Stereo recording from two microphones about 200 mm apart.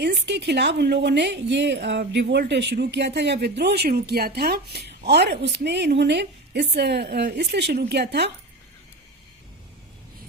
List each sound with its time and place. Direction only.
0.0 s a woman's voice: 60° right (ahead or behind)